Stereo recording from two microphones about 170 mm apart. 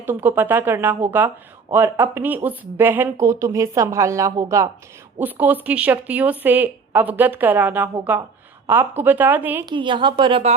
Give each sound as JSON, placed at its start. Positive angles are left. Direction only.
{"t": 0.0, "sound": "speech", "side_deg": -10}
{"t": 9.6, "sound": "a woman's voice", "side_deg": -30}